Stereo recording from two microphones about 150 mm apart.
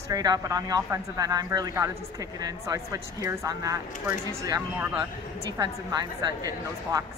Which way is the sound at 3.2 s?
20° right (ahead or behind).